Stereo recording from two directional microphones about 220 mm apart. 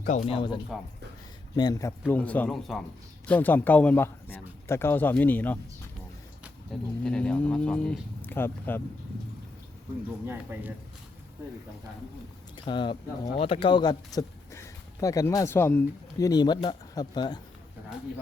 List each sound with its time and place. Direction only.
0.0 s speech: 30° left (ahead or behind); by 8.8 s 10° left (ahead or behind)
10.2 s speech: 10° right (ahead or behind)
12.5 s speech: 20° left (ahead or behind)